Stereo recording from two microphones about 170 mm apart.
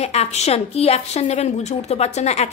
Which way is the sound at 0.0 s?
40° left (ahead or behind).